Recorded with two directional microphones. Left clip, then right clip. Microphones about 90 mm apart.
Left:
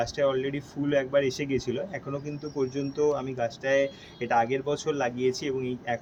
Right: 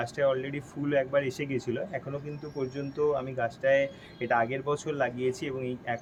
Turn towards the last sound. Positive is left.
turn(degrees=-20)  # may be behind; listen again after turning